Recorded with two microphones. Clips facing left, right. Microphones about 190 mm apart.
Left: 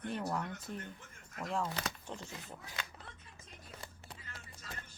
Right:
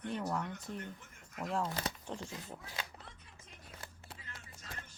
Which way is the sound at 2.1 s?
35° right (ahead or behind).